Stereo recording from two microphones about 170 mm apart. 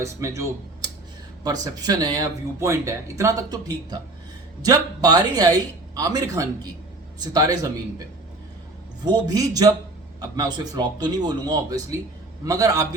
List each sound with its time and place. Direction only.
0.0 s speech: 15° right (ahead or behind)
9.0 s speech: 25° right (ahead or behind)